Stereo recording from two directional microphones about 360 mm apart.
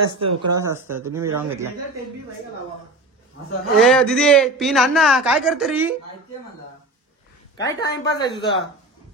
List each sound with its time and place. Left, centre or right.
0.2 s speech: right
0.7 s speech: centre
3.7 s a man's voice: centre
7.5 s a woman's voice: centre